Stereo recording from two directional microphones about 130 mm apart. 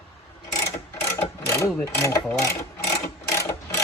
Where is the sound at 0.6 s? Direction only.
25° left (ahead or behind).